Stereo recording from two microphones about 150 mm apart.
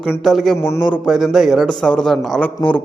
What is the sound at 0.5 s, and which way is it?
Speech, 10° left (ahead or behind).